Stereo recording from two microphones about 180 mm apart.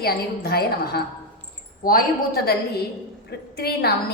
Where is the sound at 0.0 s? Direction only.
60° left (ahead or behind).